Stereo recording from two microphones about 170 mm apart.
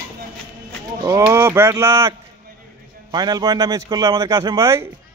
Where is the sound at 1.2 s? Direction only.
15° right (ahead or behind).